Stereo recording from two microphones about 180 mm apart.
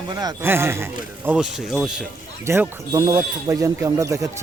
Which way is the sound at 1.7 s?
Centre (ahead or behind).